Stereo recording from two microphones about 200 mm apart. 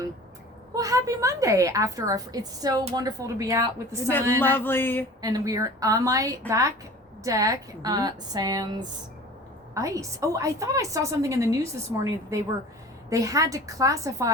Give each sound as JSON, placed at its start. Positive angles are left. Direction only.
{"t": 0.7, "sound": "a woman's voice", "side_deg": -15}
{"t": 4.4, "sound": "a sound", "side_deg": 10}
{"t": 5.2, "sound": "a woman's voice", "side_deg": -20}
{"t": 13.1, "sound": "a woman's voice", "side_deg": -15}